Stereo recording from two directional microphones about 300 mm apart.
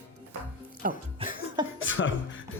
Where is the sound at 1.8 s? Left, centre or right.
Left.